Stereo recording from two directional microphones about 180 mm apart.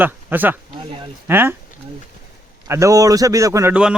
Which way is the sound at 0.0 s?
10° right (ahead or behind).